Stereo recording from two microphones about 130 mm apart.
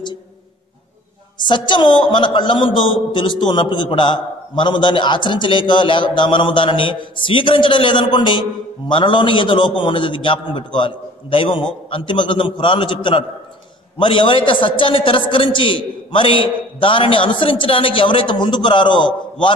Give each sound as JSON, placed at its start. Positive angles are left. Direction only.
{"t": 1.4, "sound": "a man's voice", "side_deg": 35}